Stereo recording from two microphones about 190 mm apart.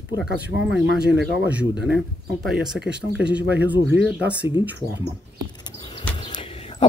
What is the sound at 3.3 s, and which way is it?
Speech, 10° right (ahead or behind).